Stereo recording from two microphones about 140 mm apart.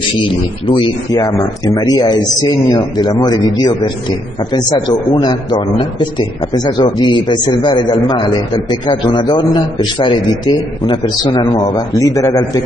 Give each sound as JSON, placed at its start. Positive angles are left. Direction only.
{"t": 1.1, "sound": "a man's voice", "side_deg": 25}